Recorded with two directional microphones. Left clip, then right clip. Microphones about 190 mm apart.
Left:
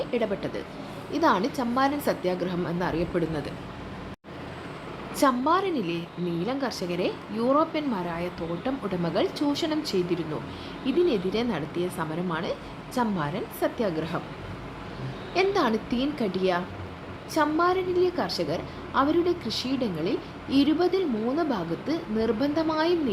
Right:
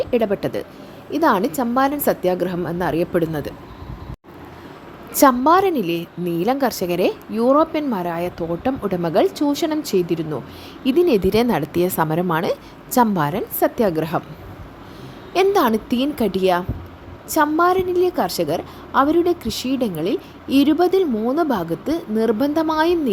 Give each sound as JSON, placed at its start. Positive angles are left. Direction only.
{"t": 0.0, "sound": "a woman's voice", "side_deg": -50}
{"t": 5.1, "sound": "a woman's voice", "side_deg": -50}
{"t": 10.8, "sound": "speech", "side_deg": -60}
{"t": 15.3, "sound": "a woman's voice", "side_deg": -55}